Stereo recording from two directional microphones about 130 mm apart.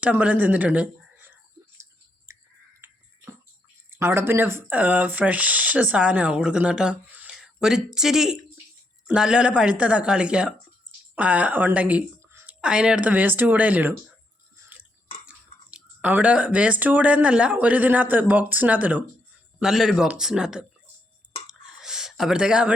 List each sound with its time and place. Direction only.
0.0 s speech: 10° right (ahead or behind)
2.3 s whispering: 20° right (ahead or behind)
2.8 s a sound: 20° right (ahead or behind)
3.8 s speech: 20° right (ahead or behind)
15.3 s speech: 10° right (ahead or behind)
21.4 s a sound: 5° right (ahead or behind)